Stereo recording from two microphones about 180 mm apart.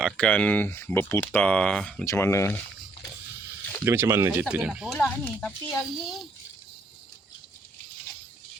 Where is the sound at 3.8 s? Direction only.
10° right (ahead or behind).